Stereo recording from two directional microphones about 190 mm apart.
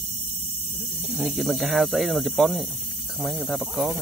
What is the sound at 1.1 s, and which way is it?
Speech, centre (ahead or behind).